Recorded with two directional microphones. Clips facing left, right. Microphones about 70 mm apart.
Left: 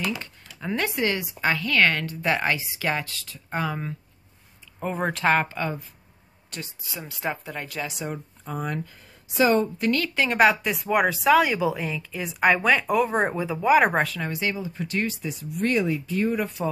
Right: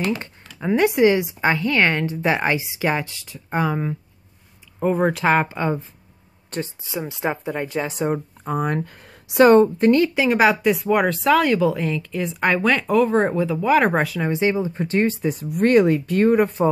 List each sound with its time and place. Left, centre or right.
0.0 s a sound: right
0.6 s a woman's voice: centre
4.8 s a woman's voice: centre; by 7.9 s right
7.9 s speech: right
8.5 s a woman's voice: right
9.8 s a woman's voice: right
10.1 s speech: centre
13.9 s speech: centre
14.2 s speech: right